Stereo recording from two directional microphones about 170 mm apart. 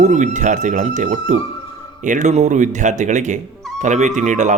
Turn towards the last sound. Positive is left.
turn(degrees=-45)  # may be behind; listen again after turning